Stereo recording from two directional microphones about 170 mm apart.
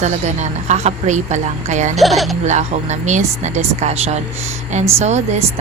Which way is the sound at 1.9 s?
Centre (ahead or behind).